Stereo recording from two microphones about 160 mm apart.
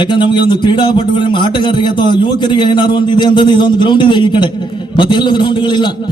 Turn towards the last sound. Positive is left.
turn(degrees=30)  # may be behind; listen again after turning